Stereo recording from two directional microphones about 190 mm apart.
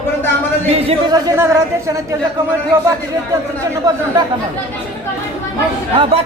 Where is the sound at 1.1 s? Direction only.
15° right (ahead or behind).